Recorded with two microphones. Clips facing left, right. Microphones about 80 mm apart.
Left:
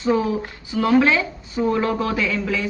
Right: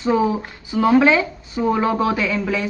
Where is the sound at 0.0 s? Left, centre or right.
Centre.